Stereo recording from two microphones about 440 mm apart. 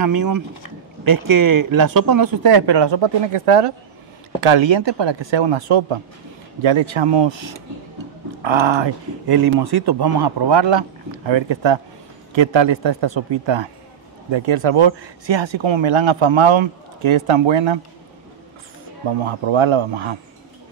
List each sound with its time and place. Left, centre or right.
0.0 s speech: right
14.3 s speech: right
19.0 s speech: right